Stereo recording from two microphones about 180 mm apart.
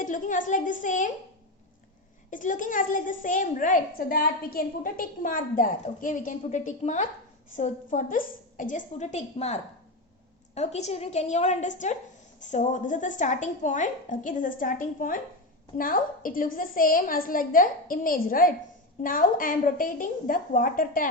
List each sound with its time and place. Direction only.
0.0 s a woman's voice: 45° left (ahead or behind)
2.3 s a woman's voice: 45° left (ahead or behind)